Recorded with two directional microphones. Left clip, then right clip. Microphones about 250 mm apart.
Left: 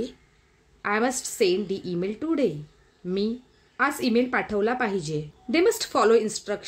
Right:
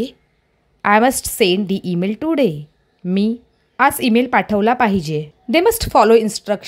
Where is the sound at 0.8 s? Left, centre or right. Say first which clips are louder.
Right 12 dB; right.